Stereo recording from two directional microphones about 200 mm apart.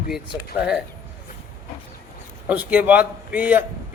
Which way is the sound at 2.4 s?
10° right (ahead or behind).